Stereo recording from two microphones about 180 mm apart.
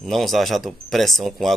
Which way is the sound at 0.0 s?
Centre (ahead or behind).